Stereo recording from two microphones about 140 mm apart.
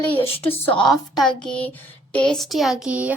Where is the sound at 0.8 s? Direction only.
Centre (ahead or behind).